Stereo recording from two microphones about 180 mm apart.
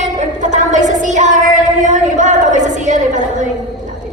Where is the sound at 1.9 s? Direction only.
40° right (ahead or behind).